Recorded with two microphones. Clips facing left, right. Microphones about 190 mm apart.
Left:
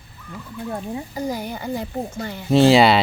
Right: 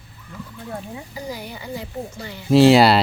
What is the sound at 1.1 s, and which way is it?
A woman's voice, 45° left (ahead or behind).